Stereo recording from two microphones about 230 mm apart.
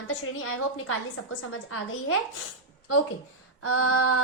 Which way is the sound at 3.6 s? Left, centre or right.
Left.